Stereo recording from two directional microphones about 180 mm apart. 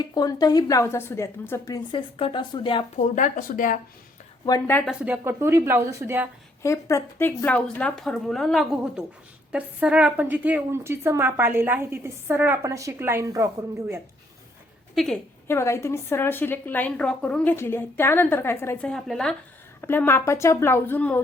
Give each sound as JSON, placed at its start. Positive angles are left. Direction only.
{"t": 0.0, "sound": "a woman's voice", "side_deg": 20}
{"t": 3.0, "sound": "speech", "side_deg": 45}
{"t": 4.4, "sound": "a woman's voice", "side_deg": 20}
{"t": 4.9, "sound": "a woman's voice", "side_deg": -10}
{"t": 6.6, "sound": "a woman's voice", "side_deg": 15}
{"t": 14.9, "sound": "a woman's voice", "side_deg": 0}
{"t": 15.4, "sound": "a woman's voice", "side_deg": 15}